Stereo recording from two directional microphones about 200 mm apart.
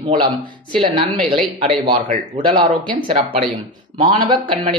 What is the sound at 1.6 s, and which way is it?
Speech, 30° right (ahead or behind).